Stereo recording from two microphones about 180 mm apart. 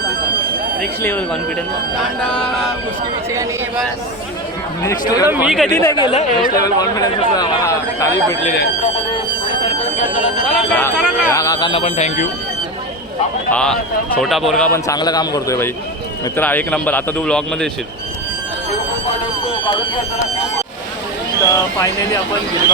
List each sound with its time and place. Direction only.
0.8 s a man's voice: 5° left (ahead or behind)
2.0 s a sound: 5° left (ahead or behind)
4.8 s speech: 20° left (ahead or behind)
5.3 s a sound: 5° right (ahead or behind)
5.7 s a man's voice: 20° left (ahead or behind)
6.1 s speech: 40° left (ahead or behind)
6.6 s speech: 20° left (ahead or behind)
10.8 s speech: 10° left (ahead or behind); by 12.3 s 40° left (ahead or behind)
13.5 s a sound: 5° left (ahead or behind)
14.7 s a man's voice: 20° left (ahead or behind); by 17.7 s 5° left (ahead or behind)
21.5 s a man's voice: 15° left (ahead or behind)